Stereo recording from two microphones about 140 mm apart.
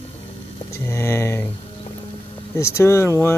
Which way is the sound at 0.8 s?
20° left (ahead or behind).